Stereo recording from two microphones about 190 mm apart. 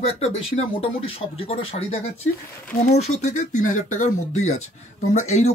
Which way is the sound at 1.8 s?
45° left (ahead or behind).